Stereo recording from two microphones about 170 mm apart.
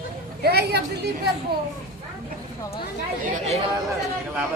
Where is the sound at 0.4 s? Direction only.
70° right (ahead or behind).